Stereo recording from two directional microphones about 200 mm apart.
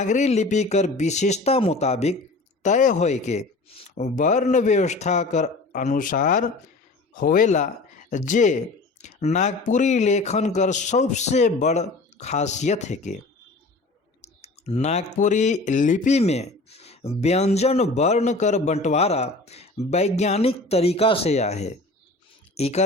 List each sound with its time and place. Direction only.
0.0 s speech: 35° left (ahead or behind)
14.2 s speech: 35° left (ahead or behind)